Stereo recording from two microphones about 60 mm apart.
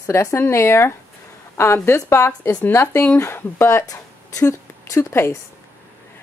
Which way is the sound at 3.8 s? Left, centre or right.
Left.